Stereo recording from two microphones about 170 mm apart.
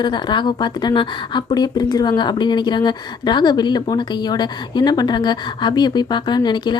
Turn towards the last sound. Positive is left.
turn(degrees=25)  # may be behind; listen again after turning